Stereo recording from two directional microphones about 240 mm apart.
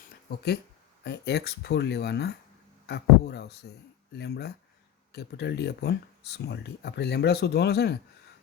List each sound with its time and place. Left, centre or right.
0.3 s speech: left